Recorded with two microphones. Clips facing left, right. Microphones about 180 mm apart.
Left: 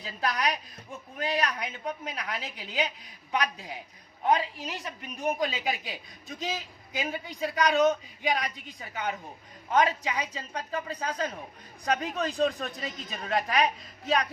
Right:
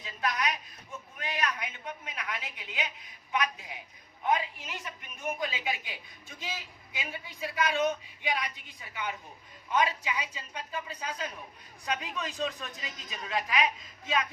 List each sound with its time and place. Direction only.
0.0 s a woman's voice: 35° left (ahead or behind)